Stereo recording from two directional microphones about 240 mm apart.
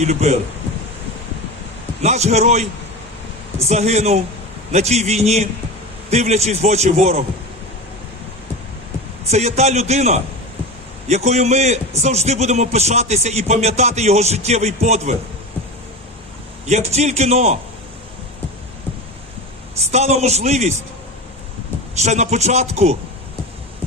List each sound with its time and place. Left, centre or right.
0.0 s a man's voice: right
2.0 s a man's voice: right
3.7 s a man's voice: right
9.3 s a man's voice: right
16.6 s a man's voice: right
19.9 s a man's voice: right
21.9 s a man's voice: right